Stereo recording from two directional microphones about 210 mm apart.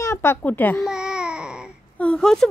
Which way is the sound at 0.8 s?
5° right (ahead or behind).